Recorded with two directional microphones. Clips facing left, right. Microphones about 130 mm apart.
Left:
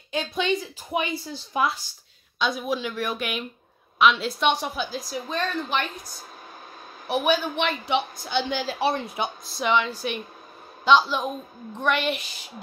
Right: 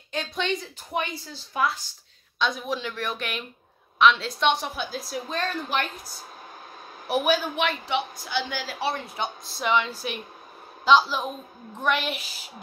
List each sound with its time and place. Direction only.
0.1 s a woman's voice: 5° left (ahead or behind)
7.1 s a woman's voice: 5° right (ahead or behind)
7.8 s a woman's voice: 25° left (ahead or behind)
9.5 s a woman's voice: centre (ahead or behind)